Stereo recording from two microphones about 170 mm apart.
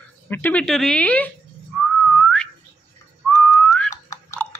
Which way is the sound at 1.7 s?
Centre (ahead or behind).